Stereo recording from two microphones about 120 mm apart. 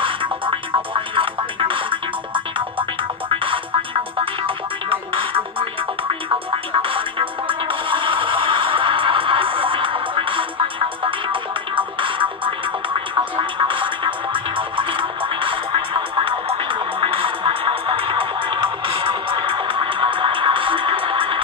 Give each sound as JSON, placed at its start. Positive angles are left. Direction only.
{"t": 0.0, "sound": "music", "side_deg": -45}
{"t": 11.7, "sound": "music", "side_deg": -45}